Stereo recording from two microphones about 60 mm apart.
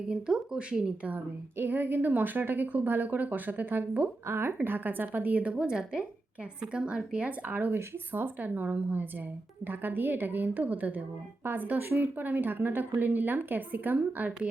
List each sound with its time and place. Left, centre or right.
0.1 s speech: centre
1.5 s a woman's voice: right
4.3 s a woman's voice: right
7.7 s a woman's voice: right